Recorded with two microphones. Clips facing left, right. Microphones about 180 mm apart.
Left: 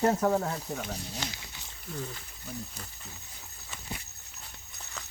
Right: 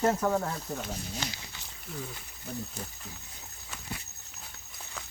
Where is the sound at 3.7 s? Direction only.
Centre (ahead or behind).